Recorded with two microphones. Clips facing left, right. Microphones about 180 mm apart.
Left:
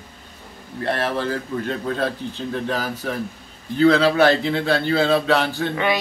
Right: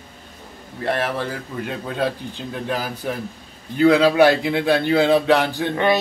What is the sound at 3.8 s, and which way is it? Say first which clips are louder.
A man's voice: right 1 dB; 15° right (ahead or behind).